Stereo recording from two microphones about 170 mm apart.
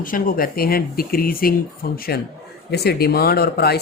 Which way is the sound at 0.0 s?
55° left (ahead or behind).